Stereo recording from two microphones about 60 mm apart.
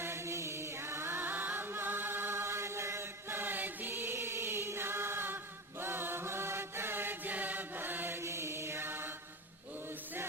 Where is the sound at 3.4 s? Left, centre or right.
Right.